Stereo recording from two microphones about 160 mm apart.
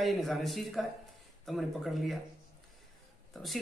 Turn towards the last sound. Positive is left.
turn(degrees=0)  # may be behind; listen again after turning